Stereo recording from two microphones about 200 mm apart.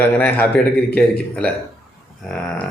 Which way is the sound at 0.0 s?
10° left (ahead or behind).